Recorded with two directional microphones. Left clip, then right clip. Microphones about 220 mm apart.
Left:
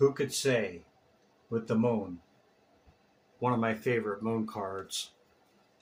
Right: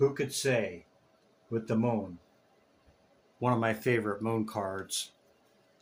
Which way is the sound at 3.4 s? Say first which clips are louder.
Right 1 dB; 35° right (ahead or behind).